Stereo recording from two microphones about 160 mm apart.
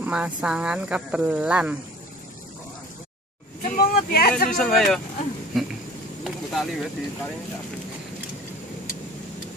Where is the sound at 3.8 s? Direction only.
70° left (ahead or behind).